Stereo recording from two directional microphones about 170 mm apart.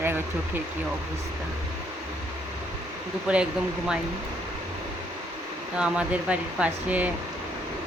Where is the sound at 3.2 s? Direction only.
5° right (ahead or behind).